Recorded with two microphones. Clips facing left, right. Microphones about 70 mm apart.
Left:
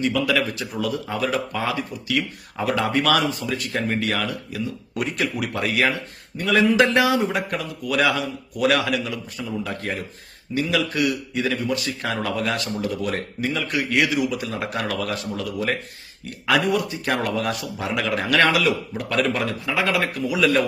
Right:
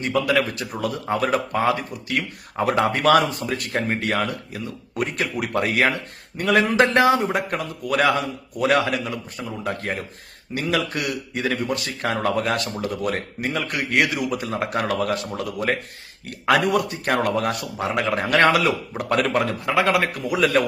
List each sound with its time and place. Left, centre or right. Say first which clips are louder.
0.0 s a man's voice: right 1 dB; right
8.6 s a man's voice: right 1 dB; right
17.9 s a man's voice: right 1 dB; right
18.3 s speech: right 1 dB; right